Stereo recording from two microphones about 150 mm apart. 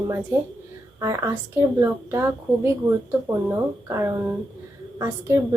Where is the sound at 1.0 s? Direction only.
20° right (ahead or behind).